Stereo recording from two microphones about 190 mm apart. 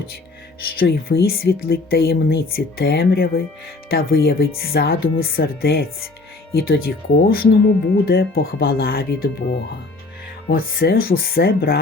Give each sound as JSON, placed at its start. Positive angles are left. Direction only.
{"t": 0.8, "sound": "speech", "side_deg": 55}